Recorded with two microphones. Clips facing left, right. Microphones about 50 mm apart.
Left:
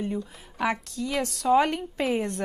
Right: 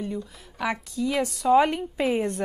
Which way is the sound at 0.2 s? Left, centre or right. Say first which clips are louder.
Left 2 dB; centre.